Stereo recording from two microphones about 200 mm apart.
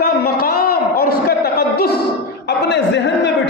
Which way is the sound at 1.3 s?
50° left (ahead or behind).